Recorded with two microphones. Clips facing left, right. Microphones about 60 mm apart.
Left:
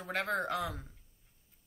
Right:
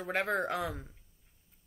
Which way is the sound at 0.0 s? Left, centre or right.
Centre.